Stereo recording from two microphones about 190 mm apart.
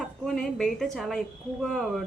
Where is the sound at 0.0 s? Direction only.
5° left (ahead or behind).